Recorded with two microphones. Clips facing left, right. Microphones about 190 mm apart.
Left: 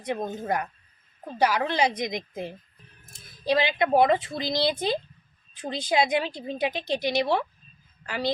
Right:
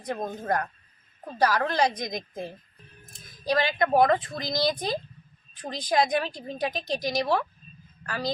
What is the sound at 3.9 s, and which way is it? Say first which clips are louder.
Speech: left 1 dB; 25° left (ahead or behind).